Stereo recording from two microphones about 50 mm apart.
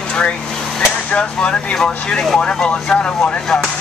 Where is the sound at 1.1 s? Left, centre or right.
Left.